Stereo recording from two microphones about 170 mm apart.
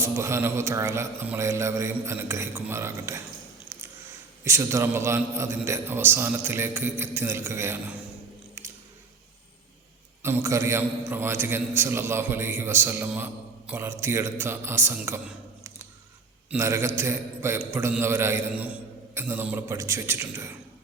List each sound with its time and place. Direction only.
0.0 s a man's voice: 15° right (ahead or behind)
4.4 s a man's voice: 15° right (ahead or behind)
8.6 s squish: 15° right (ahead or behind)
10.2 s a man's voice: 15° right (ahead or behind)
16.5 s a man's voice: 15° right (ahead or behind)